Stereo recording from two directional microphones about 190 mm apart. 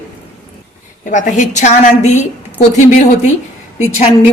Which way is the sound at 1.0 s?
40° left (ahead or behind).